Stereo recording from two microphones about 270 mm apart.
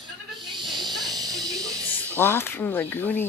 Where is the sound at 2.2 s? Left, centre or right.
Centre.